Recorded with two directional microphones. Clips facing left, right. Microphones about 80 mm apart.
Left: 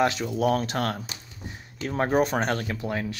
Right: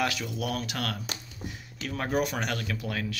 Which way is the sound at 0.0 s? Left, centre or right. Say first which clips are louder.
Left 7 dB; left.